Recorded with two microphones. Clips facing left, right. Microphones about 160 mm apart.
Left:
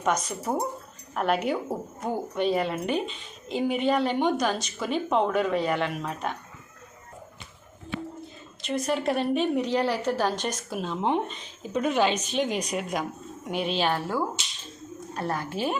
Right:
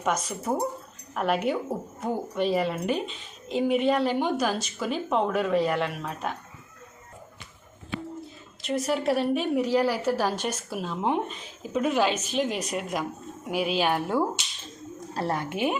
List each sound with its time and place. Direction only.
0.0 s a woman's voice: 5° right (ahead or behind)
8.6 s a woman's voice: centre (ahead or behind)
15.1 s a woman's voice: 30° right (ahead or behind)